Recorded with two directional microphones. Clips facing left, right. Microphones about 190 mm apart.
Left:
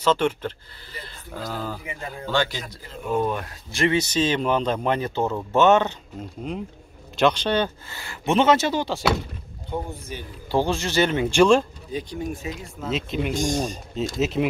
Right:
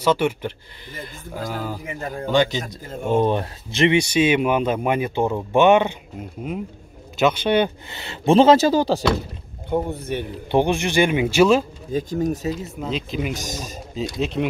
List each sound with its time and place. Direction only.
0.0 s speech: 10° right (ahead or behind)
1.9 s speech: 45° right (ahead or behind)
2.2 s speech: 20° right (ahead or behind)
3.1 s speech: 30° right (ahead or behind)
3.8 s speech: 15° right (ahead or behind); by 9.0 s 35° right (ahead or behind)
9.8 s speech: 65° right (ahead or behind)
10.5 s speech: 15° right (ahead or behind)
11.9 s speech: 45° right (ahead or behind)
12.6 s speech: centre (ahead or behind)